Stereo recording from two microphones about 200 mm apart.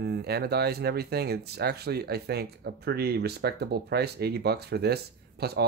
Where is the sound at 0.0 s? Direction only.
55° right (ahead or behind).